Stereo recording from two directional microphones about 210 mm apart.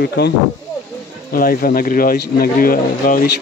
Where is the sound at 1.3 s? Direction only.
45° left (ahead or behind).